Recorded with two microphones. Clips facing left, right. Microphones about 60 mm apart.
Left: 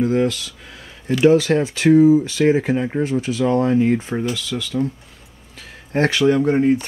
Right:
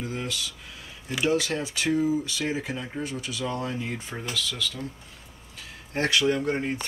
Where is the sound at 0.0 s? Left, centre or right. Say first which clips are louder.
Left 14 dB; left.